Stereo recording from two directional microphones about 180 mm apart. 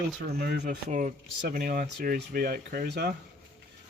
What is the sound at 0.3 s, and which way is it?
Speech, 60° right (ahead or behind).